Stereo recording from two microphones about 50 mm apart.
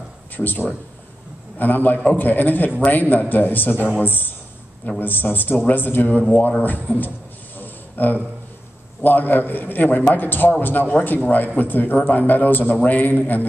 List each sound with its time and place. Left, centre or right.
0.4 s a man's voice: left
1.6 s a man's voice: left
7.5 s a sound: left
9.0 s a man's voice: left